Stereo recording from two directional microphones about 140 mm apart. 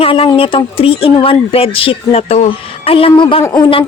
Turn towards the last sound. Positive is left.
turn(degrees=35)  # may be behind; listen again after turning